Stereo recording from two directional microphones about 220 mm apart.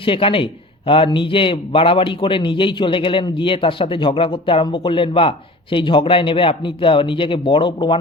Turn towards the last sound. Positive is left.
turn(degrees=20)  # may be behind; listen again after turning